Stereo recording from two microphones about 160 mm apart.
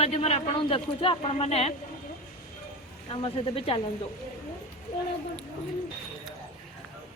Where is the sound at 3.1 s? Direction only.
35° left (ahead or behind).